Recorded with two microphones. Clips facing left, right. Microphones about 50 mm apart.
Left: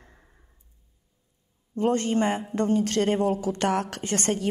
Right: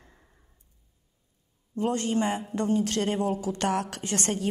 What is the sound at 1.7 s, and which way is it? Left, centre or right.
A woman's voice, left.